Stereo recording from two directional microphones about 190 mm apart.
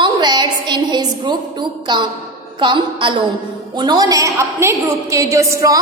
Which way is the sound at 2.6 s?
25° right (ahead or behind).